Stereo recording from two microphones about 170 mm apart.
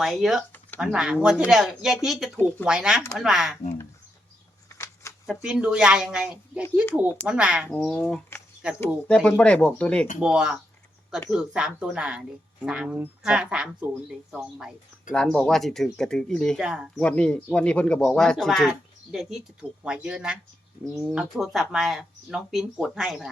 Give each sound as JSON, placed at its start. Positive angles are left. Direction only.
{"t": 0.0, "sound": "speech", "side_deg": 0}
{"t": 4.7, "sound": "a sound", "side_deg": 15}
{"t": 5.2, "sound": "speech", "side_deg": -5}
{"t": 7.7, "sound": "speech", "side_deg": 5}
{"t": 10.3, "sound": "speech", "side_deg": -5}
{"t": 15.1, "sound": "speech", "side_deg": 5}
{"t": 17.0, "sound": "speech", "side_deg": 5}